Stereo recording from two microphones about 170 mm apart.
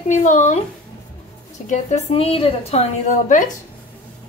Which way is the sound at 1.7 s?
40° left (ahead or behind).